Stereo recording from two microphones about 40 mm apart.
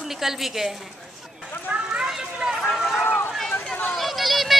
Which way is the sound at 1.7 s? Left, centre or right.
Right.